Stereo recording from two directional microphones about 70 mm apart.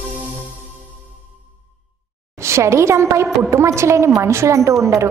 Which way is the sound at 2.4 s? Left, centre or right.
Right.